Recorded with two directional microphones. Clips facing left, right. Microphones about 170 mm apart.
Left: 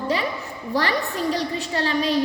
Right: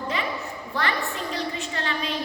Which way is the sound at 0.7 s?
35° left (ahead or behind).